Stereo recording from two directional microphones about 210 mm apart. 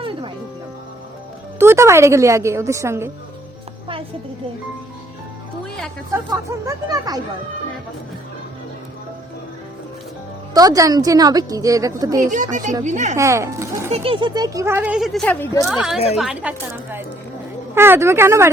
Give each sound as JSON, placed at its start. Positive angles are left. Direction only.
{"t": 1.5, "sound": "speech", "side_deg": -10}
{"t": 6.7, "sound": "speech", "side_deg": -15}
{"t": 10.5, "sound": "speech", "side_deg": -15}
{"t": 12.2, "sound": "speech", "side_deg": -35}
{"t": 13.1, "sound": "speech", "side_deg": -15}
{"t": 13.9, "sound": "speech", "side_deg": -25}